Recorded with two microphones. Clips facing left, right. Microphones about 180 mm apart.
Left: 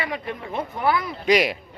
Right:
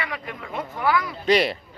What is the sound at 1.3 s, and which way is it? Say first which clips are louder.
Speech: even; 10° left (ahead or behind).